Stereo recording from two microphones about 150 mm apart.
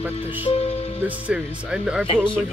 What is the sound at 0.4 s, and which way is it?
Music, 40° left (ahead or behind).